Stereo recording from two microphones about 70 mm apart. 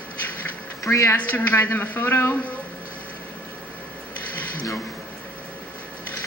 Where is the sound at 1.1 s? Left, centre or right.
Left.